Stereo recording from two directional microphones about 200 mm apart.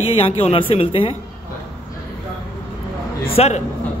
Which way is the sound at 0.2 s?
30° left (ahead or behind).